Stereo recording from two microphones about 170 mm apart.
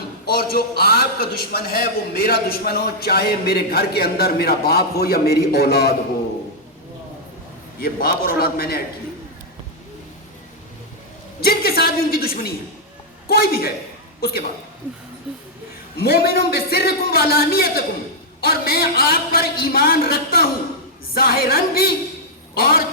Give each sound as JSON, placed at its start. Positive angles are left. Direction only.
{"t": 0.3, "sound": "a man's voice", "side_deg": 65}
{"t": 7.8, "sound": "a man's voice", "side_deg": 60}
{"t": 11.3, "sound": "a man's voice", "side_deg": 65}
{"t": 15.3, "sound": "a sound", "side_deg": -5}
{"t": 16.0, "sound": "a man's voice", "side_deg": 65}